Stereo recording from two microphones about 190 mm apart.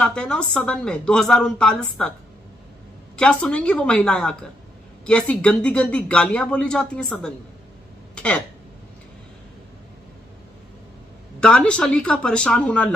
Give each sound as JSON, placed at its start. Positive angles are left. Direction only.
{"t": 0.0, "sound": "speech", "side_deg": 5}
{"t": 3.2, "sound": "speech", "side_deg": 5}
{"t": 11.3, "sound": "speech", "side_deg": 5}